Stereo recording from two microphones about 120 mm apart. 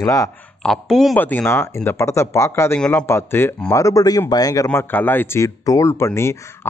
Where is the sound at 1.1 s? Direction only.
15° left (ahead or behind); by 4.6 s 30° left (ahead or behind).